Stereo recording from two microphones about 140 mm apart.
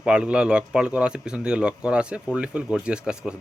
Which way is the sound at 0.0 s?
5° right (ahead or behind).